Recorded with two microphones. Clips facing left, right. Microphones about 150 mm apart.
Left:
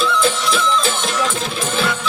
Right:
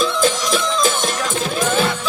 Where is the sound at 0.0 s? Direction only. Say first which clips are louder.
Even; 40° right (ahead or behind).